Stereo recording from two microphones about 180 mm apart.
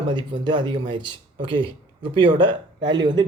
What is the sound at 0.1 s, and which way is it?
Speech, 25° right (ahead or behind).